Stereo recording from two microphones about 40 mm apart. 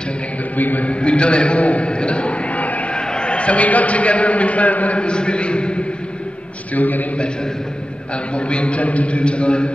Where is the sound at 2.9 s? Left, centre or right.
Left.